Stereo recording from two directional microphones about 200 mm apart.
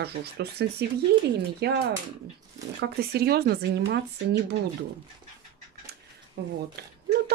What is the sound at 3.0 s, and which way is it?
Speech, 50° right (ahead or behind).